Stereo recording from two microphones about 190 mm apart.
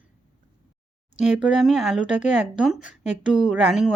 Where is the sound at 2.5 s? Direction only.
5° right (ahead or behind).